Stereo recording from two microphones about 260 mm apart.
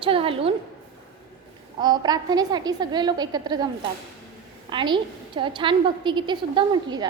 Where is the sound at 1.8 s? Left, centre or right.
Centre.